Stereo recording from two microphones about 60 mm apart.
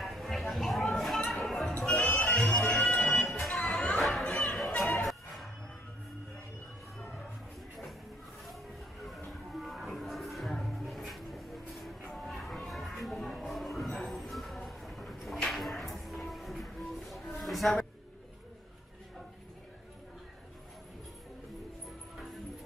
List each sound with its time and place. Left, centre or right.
0.0 s a sound: centre
1.8 s music: left
2.3 s bagpipes: centre
2.9 s music: left
3.6 s chatter: centre
4.0 s chatter: centre
4.5 s music: centre
9.6 s music: centre
17.3 s a sound: centre